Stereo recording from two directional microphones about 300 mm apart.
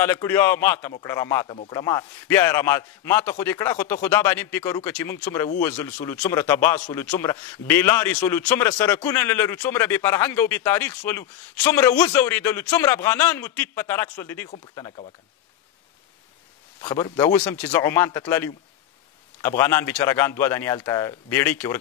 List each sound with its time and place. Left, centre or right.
0.0 s a man's voice: centre
16.8 s a man's voice: centre